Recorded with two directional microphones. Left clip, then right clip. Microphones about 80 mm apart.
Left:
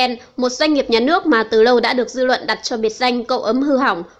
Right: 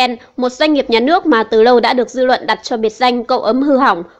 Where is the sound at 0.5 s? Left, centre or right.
Right.